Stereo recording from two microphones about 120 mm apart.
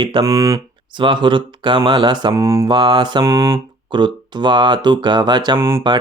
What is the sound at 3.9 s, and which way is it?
Speech, 40° right (ahead or behind).